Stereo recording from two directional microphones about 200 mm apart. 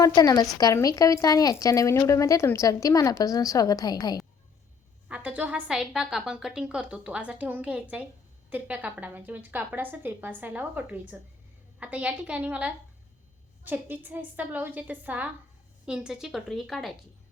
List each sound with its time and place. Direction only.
0.0 s a woman's voice: 20° left (ahead or behind)
5.0 s a woman's voice: 5° right (ahead or behind)